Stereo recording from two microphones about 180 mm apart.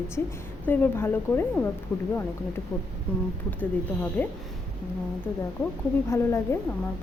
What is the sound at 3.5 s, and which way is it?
Speech, 10° left (ahead or behind).